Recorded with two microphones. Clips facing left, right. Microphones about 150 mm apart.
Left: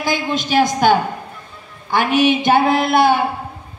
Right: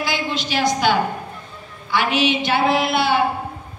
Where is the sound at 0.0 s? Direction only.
50° left (ahead or behind).